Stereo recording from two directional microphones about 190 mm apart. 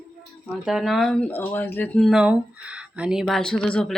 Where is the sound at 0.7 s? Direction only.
Centre (ahead or behind).